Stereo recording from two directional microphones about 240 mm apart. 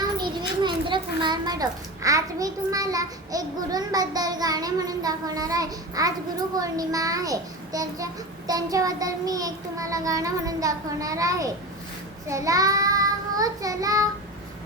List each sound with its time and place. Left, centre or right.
0.6 s a child's voice: centre
12.3 s child singing: centre